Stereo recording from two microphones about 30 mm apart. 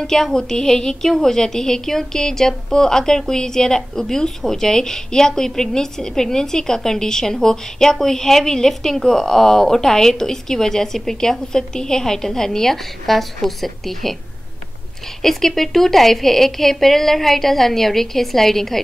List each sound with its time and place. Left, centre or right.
0.0 s a woman's voice: centre
15.2 s a woman's voice: centre